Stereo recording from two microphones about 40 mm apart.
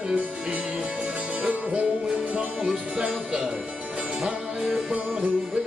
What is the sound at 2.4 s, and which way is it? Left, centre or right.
Music, right.